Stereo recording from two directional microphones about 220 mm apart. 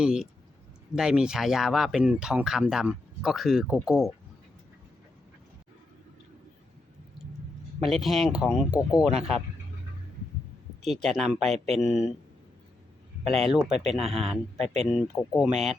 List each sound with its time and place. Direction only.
0.0 s speech: 5° right (ahead or behind)
7.9 s speech: centre (ahead or behind)
10.8 s speech: centre (ahead or behind)
11.5 s speech: 30° right (ahead or behind)
11.9 s speech: centre (ahead or behind)
13.2 s speech: centre (ahead or behind)
14.6 s speech: 30° right (ahead or behind)
14.8 s speech: 5° right (ahead or behind)